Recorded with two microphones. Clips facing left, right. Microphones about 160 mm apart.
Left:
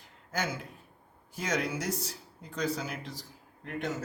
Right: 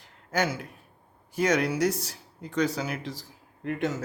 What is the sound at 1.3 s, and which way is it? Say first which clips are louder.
Speech: right 7 dB; 70° right (ahead or behind).